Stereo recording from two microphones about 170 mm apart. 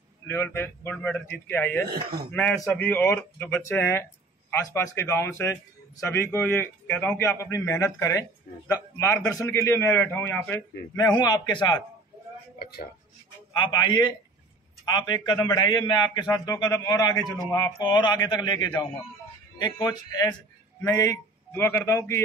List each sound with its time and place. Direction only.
0.3 s speech: 15° left (ahead or behind)
1.9 s speech: 30° right (ahead or behind)
2.3 s speech: 5° left (ahead or behind)
11.1 s a man's voice: 25° left (ahead or behind)
12.5 s speech: 65° left (ahead or behind)
13.5 s a man's voice: 25° left (ahead or behind)